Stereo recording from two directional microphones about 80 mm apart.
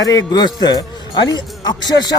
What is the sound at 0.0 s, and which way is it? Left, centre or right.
A man's voice, left.